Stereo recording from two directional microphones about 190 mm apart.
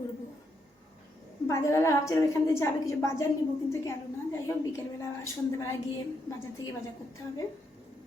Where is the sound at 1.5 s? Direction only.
15° left (ahead or behind).